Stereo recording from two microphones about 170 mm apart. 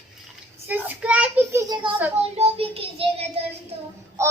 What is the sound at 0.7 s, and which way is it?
Child singing, 10° right (ahead or behind).